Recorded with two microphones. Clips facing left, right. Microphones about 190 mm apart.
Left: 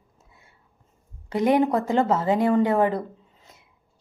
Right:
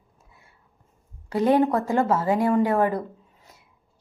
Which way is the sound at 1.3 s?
15° left (ahead or behind).